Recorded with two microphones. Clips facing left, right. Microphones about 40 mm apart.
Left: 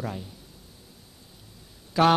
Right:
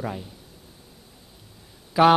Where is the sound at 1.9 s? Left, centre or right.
Centre.